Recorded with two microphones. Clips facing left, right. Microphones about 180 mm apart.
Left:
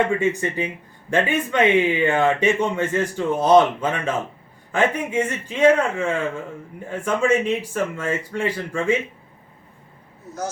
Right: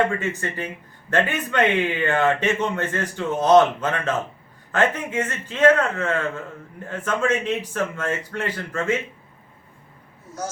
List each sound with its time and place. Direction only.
0.2 s a man's voice: 15° left (ahead or behind)